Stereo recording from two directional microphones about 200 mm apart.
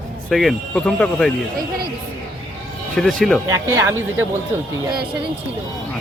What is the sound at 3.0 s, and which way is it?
Speech, centre (ahead or behind).